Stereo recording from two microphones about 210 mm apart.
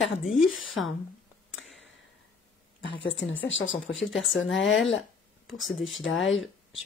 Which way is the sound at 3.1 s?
65° left (ahead or behind).